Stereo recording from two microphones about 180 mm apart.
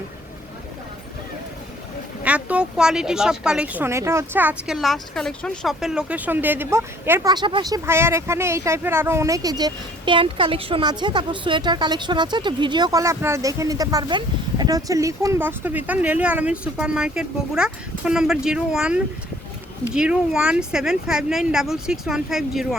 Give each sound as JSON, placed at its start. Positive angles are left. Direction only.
{"t": 2.2, "sound": "speech", "side_deg": -5}
{"t": 7.3, "sound": "speech", "side_deg": -25}